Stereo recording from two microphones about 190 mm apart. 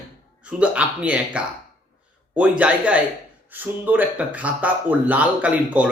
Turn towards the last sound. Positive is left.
turn(degrees=-5)  # may be behind; listen again after turning